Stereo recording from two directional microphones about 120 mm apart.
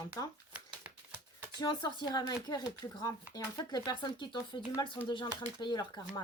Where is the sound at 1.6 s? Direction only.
35° left (ahead or behind).